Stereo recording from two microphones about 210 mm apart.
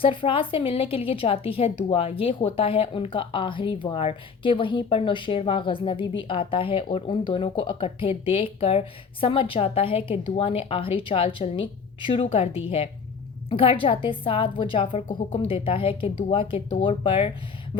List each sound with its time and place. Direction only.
0.0 s a woman's voice: 25° left (ahead or behind)